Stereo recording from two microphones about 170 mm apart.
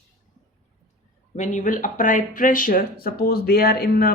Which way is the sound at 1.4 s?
45° left (ahead or behind).